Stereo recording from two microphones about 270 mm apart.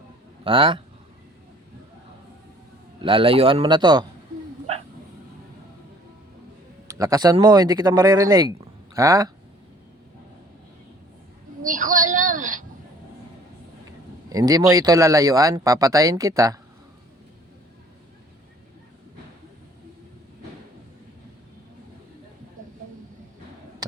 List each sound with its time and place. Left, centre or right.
0.4 s a man's voice: centre
3.0 s a man's voice: centre
6.8 s speech: centre
11.6 s a sound: right
14.3 s speech: centre